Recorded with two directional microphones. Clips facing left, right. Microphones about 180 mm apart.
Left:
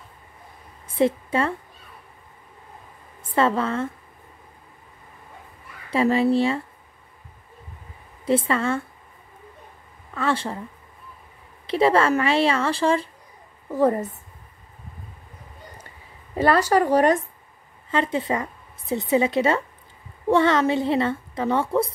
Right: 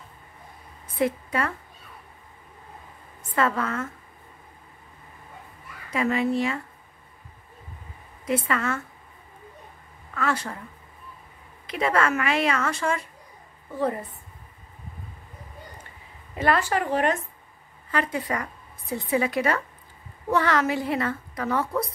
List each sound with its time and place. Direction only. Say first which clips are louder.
0.9 s a woman's voice: left 4 dB; 25° left (ahead or behind)
3.2 s a woman's voice: left 4 dB; 30° left (ahead or behind)
5.9 s speech: left 5 dB; 30° left (ahead or behind)
8.3 s a woman's voice: left 4 dB; 30° left (ahead or behind)
10.1 s a woman's voice: left 3 dB; 30° left (ahead or behind)
11.6 s a woman's voice: left 5 dB; 30° left (ahead or behind)
13.7 s a woman's voice: left 7 dB; 40° left (ahead or behind)
16.3 s speech: left 5 dB; 35° left (ahead or behind)
17.9 s a woman's voice: left 4 dB; 25° left (ahead or behind)